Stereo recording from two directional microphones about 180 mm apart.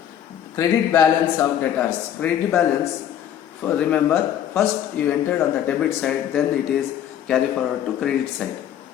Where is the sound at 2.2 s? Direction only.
10° left (ahead or behind).